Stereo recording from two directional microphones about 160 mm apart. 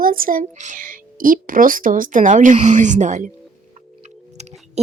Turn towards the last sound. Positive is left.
turn(degrees=-50)  # may be behind; listen again after turning